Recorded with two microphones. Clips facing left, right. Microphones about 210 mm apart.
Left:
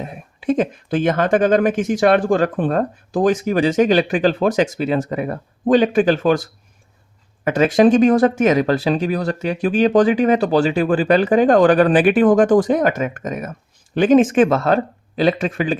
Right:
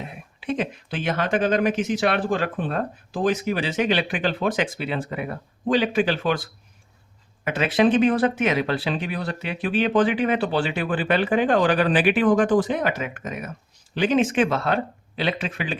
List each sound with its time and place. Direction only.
0.0 s speech: 45° left (ahead or behind)
7.4 s speech: 45° left (ahead or behind)